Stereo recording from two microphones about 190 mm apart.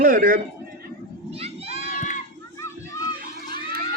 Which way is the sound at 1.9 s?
40° left (ahead or behind).